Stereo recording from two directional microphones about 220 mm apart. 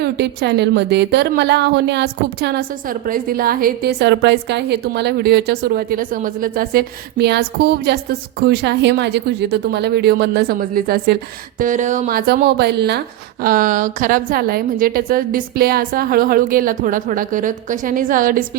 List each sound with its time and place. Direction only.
0.0 s a woman's voice: 50° right (ahead or behind)
11.6 s a woman's voice: 35° right (ahead or behind)